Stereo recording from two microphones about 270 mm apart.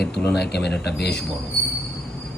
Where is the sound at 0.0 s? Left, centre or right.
Centre.